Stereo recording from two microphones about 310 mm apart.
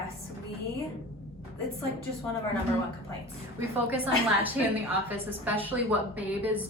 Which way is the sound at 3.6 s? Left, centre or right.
Centre.